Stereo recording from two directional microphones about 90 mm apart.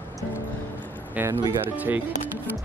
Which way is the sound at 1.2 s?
20° right (ahead or behind).